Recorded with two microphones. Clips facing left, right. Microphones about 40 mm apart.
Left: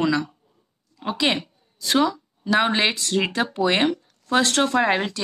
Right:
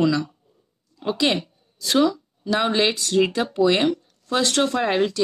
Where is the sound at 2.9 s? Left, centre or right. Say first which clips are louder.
Right 3 dB; left.